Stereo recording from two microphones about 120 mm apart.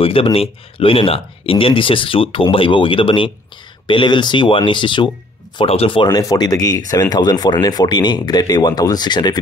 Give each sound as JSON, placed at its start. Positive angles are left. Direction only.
{"t": 0.0, "sound": "speech", "side_deg": 50}
{"t": 6.0, "sound": "speech", "side_deg": 30}